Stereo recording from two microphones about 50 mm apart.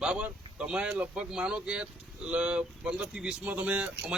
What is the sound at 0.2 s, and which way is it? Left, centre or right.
A man's voice, right.